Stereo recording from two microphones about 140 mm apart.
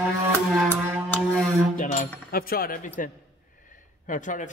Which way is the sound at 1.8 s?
75° left (ahead or behind).